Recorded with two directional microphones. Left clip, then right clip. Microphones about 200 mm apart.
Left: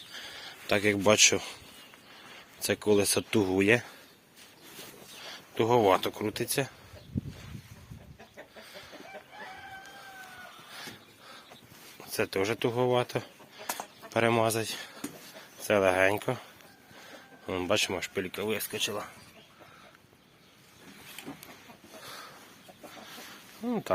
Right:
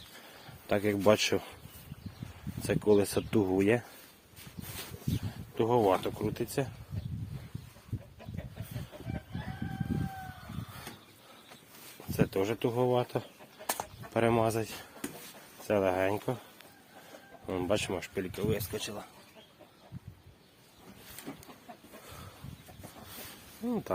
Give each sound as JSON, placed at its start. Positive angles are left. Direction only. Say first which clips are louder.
{"t": 0.7, "sound": "speech", "louder": "left 2 dB", "side_deg": -10}
{"t": 2.6, "sound": "speech", "louder": "left 1 dB", "side_deg": -15}
{"t": 5.5, "sound": "speech", "louder": "left 3 dB", "side_deg": -5}
{"t": 12.1, "sound": "speech", "louder": "left 2 dB", "side_deg": -15}
{"t": 13.7, "sound": "a sound", "louder": "right 1 dB", "side_deg": -15}
{"t": 15.6, "sound": "speech", "louder": "left 4 dB", "side_deg": -10}
{"t": 17.4, "sound": "speech", "louder": "left 3 dB", "side_deg": -15}
{"t": 21.3, "sound": "a sound", "louder": "right 2 dB", "side_deg": 5}
{"t": 23.6, "sound": "snake", "louder": "left 2 dB", "side_deg": -5}